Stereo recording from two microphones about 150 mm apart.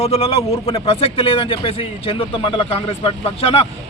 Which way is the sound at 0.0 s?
40° left (ahead or behind).